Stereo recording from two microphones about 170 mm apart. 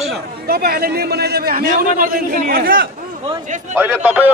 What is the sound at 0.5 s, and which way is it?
A man's voice, 65° right (ahead or behind).